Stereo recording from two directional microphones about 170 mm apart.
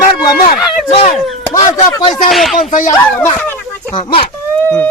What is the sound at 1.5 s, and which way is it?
Speech, 25° left (ahead or behind).